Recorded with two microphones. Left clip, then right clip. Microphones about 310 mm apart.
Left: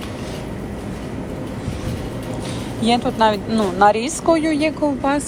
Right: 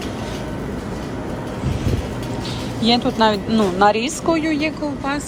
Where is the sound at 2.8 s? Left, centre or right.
Centre.